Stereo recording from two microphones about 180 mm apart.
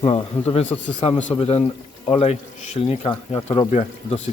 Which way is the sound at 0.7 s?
30° left (ahead or behind).